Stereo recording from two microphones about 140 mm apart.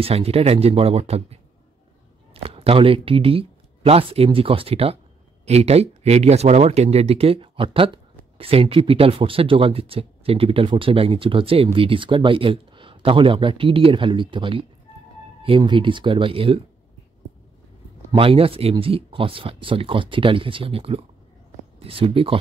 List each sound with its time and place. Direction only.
0.0 s speech: 45° right (ahead or behind)
18.1 s speech: 40° right (ahead or behind)